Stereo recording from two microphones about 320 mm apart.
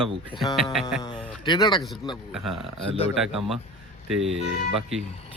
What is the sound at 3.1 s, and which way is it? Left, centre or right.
Speech, centre.